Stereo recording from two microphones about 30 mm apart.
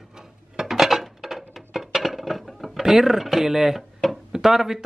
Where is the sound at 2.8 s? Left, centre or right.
Centre.